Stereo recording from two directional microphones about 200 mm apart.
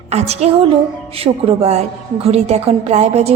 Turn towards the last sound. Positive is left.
turn(degrees=-30)  # may be behind; listen again after turning